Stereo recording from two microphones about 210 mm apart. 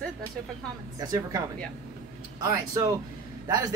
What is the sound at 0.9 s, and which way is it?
Speech, 15° right (ahead or behind).